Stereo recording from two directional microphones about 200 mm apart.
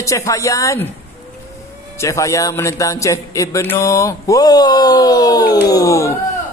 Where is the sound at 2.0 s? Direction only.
15° left (ahead or behind).